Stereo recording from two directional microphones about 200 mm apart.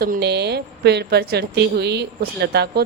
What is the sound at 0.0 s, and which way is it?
A woman's voice, 55° right (ahead or behind).